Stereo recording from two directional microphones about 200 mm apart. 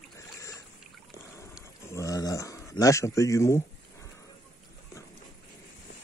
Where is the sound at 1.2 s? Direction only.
15° left (ahead or behind).